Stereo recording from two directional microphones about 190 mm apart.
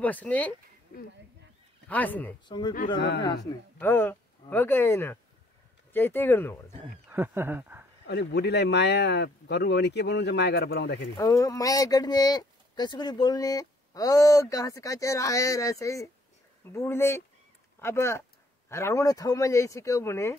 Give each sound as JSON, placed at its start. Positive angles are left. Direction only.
{"t": 0.0, "sound": "speech", "side_deg": 10}
{"t": 1.9, "sound": "speech", "side_deg": 10}
{"t": 2.4, "sound": "speech", "side_deg": 25}
{"t": 3.0, "sound": "speech", "side_deg": 65}
{"t": 3.8, "sound": "speech", "side_deg": 10}
{"t": 7.1, "sound": "speech", "side_deg": -10}
{"t": 8.1, "sound": "speech", "side_deg": 60}
{"t": 11.1, "sound": "speech", "side_deg": 15}